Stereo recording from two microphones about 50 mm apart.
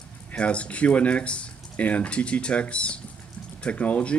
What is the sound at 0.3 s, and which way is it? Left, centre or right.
Speech, left.